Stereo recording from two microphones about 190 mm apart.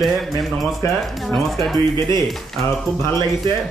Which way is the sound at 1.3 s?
Centre (ahead or behind).